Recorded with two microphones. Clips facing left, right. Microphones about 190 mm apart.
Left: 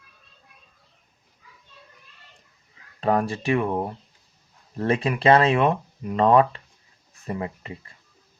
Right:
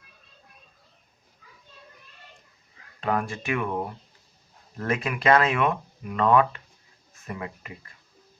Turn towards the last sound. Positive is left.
turn(degrees=25)  # may be behind; listen again after turning